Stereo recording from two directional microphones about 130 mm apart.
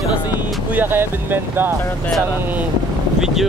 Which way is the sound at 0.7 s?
15° right (ahead or behind).